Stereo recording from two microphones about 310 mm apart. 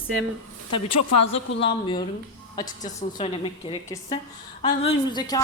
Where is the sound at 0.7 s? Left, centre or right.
Left.